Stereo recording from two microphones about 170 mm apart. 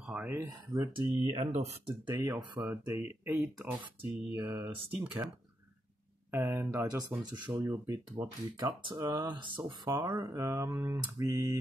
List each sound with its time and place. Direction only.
0.0 s speech: 10° right (ahead or behind); by 2.0 s 40° right (ahead or behind)
2.1 s speech: 15° right (ahead or behind)
6.3 s speech: 15° right (ahead or behind)
9.9 s speech: 15° right (ahead or behind)